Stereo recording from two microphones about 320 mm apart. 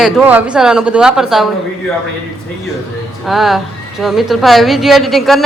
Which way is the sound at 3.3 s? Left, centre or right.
Centre.